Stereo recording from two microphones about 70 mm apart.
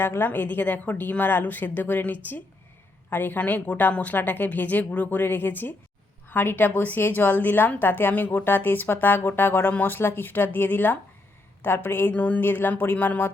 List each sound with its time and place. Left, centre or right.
0.0 s a woman's voice: left